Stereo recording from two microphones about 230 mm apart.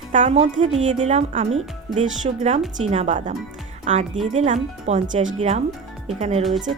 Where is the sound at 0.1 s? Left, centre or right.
Right.